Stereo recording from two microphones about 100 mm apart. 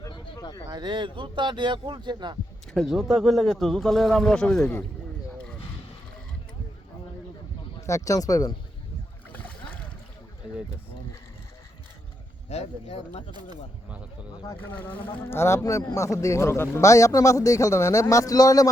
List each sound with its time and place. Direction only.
0.7 s speech: 50° right (ahead or behind)
2.7 s speech: centre (ahead or behind)
7.9 s a man's voice: 30° left (ahead or behind)
9.3 s rowboat: 15° left (ahead or behind)
12.5 s speech: 90° left
14.6 s a man's voice: 20° left (ahead or behind); by 18.7 s 35° left (ahead or behind)